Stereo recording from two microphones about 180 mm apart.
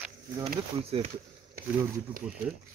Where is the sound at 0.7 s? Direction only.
35° right (ahead or behind).